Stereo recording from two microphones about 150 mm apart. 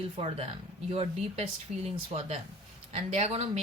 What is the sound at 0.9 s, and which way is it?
Speech, 40° right (ahead or behind).